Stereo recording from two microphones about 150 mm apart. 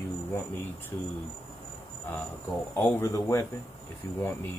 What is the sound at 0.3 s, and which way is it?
Speech, 15° left (ahead or behind).